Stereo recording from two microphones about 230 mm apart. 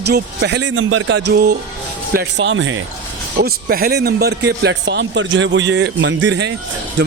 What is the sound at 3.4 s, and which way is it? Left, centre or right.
A man's voice, right.